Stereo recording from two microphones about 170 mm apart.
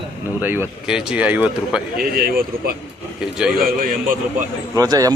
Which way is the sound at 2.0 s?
60° right (ahead or behind).